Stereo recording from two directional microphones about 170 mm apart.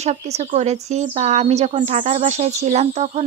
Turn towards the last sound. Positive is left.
turn(degrees=-40)  # may be behind; listen again after turning